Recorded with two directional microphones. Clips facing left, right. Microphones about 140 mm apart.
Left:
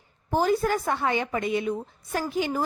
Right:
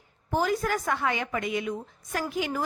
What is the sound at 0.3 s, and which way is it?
A woman's voice, 30° left (ahead or behind).